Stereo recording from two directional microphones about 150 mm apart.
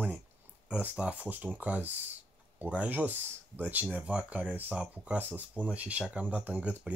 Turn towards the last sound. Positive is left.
turn(degrees=-10)  # may be behind; listen again after turning